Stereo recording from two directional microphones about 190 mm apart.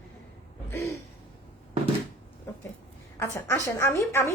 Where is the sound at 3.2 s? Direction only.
15° left (ahead or behind).